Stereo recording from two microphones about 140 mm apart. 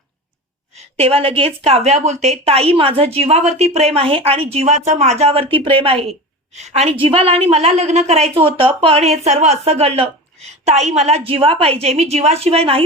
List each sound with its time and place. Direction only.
0.9 s a woman's voice: 45° right (ahead or behind)
6.5 s a woman's voice: 50° right (ahead or behind)
7.0 s a woman's voice: 40° right (ahead or behind)